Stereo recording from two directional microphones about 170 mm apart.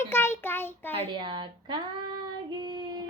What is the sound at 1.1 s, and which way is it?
Speech, 25° right (ahead or behind).